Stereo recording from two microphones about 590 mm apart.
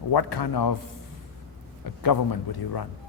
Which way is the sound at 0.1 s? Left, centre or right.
Left.